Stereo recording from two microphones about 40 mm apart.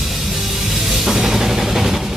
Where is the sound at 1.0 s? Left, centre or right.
Centre.